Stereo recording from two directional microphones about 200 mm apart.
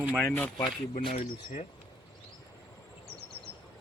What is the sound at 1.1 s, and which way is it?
Speech, 35° left (ahead or behind).